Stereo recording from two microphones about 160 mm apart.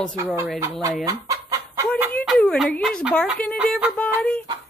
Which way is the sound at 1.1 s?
20° right (ahead or behind).